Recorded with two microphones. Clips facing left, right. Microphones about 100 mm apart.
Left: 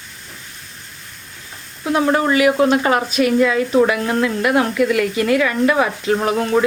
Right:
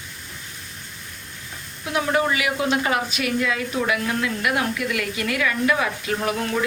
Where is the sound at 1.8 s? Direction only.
40° left (ahead or behind).